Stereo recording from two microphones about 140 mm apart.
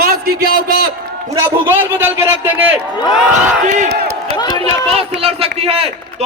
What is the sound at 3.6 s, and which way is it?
Crowd, 60° right (ahead or behind).